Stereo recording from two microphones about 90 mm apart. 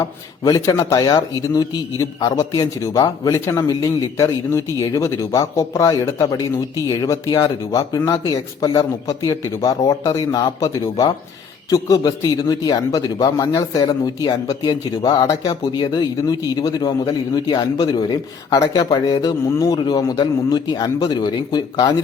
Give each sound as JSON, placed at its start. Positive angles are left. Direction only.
{"t": 0.0, "sound": "a man's voice", "side_deg": 40}